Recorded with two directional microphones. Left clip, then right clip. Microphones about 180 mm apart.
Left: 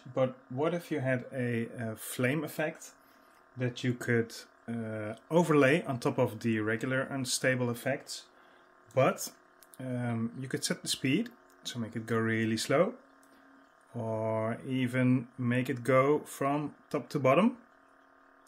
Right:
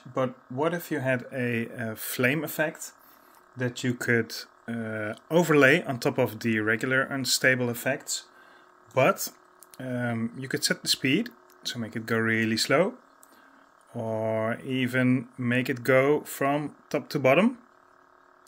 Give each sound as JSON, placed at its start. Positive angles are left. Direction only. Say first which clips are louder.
{"t": 0.1, "sound": "speech", "louder": "right 2 dB", "side_deg": -15}
{"t": 13.9, "sound": "speech", "louder": "right 5 dB", "side_deg": -10}